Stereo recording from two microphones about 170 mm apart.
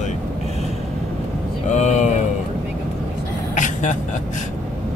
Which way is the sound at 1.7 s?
45° left (ahead or behind).